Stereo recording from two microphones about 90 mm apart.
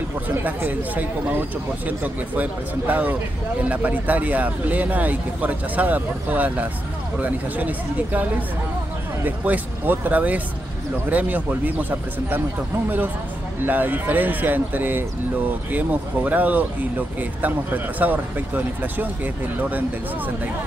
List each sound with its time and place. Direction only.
0.4 s speech: 20° right (ahead or behind)
13.7 s speech: 20° right (ahead or behind)